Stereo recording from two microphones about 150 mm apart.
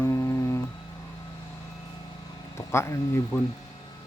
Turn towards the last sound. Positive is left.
turn(degrees=20)  # may be behind; listen again after turning